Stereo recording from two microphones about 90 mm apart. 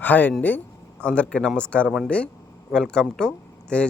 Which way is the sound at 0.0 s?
20° left (ahead or behind).